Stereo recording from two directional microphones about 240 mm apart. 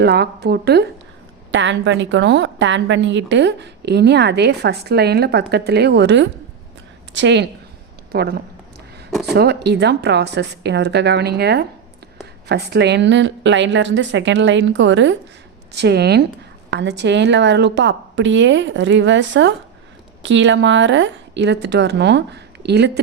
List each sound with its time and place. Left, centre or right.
0.0 s a woman's voice: right
9.0 s a sound: centre
9.3 s a woman's voice: right